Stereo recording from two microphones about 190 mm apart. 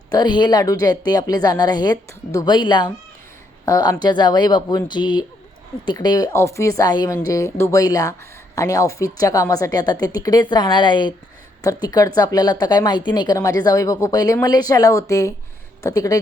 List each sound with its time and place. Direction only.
0.1 s a woman's voice: 20° left (ahead or behind)